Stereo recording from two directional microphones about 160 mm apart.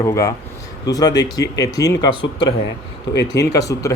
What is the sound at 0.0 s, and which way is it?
Speech, 20° left (ahead or behind).